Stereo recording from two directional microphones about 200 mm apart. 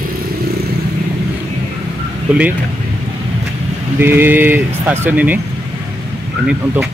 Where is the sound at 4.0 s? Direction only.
10° right (ahead or behind).